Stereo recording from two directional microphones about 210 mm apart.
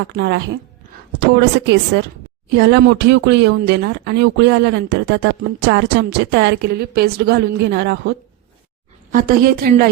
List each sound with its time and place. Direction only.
0.1 s a woman's voice: 50° right (ahead or behind)
9.1 s speech: 45° right (ahead or behind)